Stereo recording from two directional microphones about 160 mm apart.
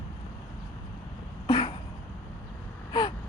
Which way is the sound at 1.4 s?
30° left (ahead or behind).